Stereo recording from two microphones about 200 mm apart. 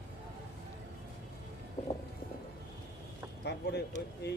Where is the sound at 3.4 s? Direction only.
55° left (ahead or behind).